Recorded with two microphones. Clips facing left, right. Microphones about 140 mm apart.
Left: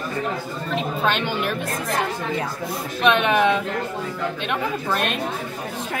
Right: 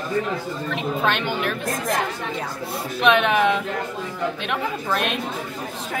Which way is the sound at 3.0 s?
Centre (ahead or behind).